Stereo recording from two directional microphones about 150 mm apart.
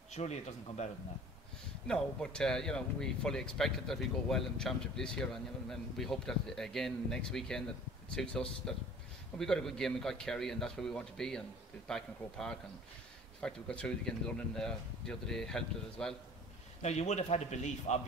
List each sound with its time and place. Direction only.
0.1 s speech: 50° left (ahead or behind)
1.9 s speech: 5° left (ahead or behind)
16.8 s speech: 50° left (ahead or behind)